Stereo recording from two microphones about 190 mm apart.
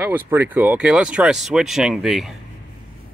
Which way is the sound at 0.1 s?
10° right (ahead or behind).